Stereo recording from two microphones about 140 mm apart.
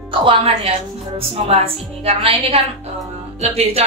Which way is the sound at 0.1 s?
40° right (ahead or behind).